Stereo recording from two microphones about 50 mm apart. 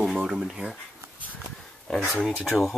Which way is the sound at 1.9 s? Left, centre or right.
Centre.